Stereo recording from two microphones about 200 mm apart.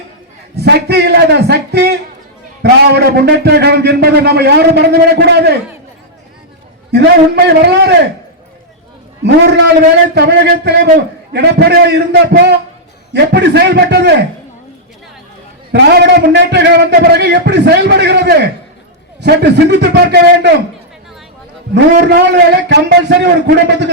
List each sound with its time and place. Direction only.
0.5 s a man's voice: 55° right (ahead or behind)
6.9 s a man's voice: 55° right (ahead or behind)
10.2 s a man's voice: 55° right (ahead or behind)
15.7 s a man's voice: 55° right (ahead or behind)
21.9 s a man's voice: 55° right (ahead or behind)